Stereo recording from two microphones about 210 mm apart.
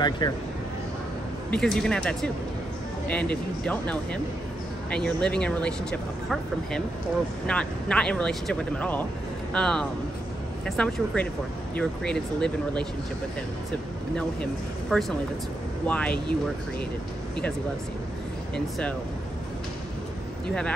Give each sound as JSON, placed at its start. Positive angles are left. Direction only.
{"t": 0.2, "sound": "speech", "side_deg": 20}
{"t": 1.5, "sound": "speech", "side_deg": 5}
{"t": 14.1, "sound": "speech", "side_deg": 5}
{"t": 20.4, "sound": "speech", "side_deg": 5}